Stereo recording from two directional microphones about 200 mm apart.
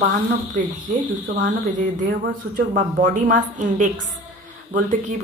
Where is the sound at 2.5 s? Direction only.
40° right (ahead or behind).